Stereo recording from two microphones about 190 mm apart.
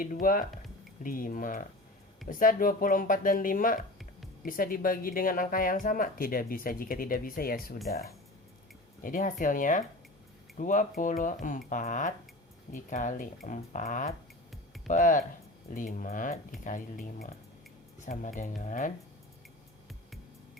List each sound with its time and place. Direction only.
0.0 s speech: 45° left (ahead or behind)
9.0 s speech: 45° left (ahead or behind)